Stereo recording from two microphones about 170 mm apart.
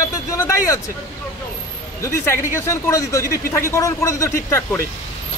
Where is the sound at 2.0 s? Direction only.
15° left (ahead or behind).